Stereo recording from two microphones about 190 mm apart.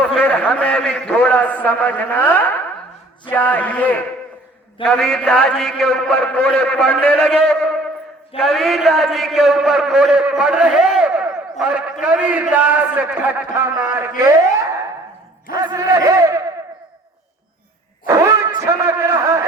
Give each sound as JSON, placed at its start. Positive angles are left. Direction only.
{"t": 0.0, "sound": "a man's voice", "side_deg": 5}
{"t": 14.2, "sound": "a sound", "side_deg": -15}
{"t": 15.5, "sound": "a man's voice", "side_deg": -20}
{"t": 18.0, "sound": "a man's voice", "side_deg": -15}